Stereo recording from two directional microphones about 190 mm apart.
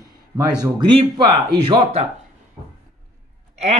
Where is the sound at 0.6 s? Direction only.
25° right (ahead or behind).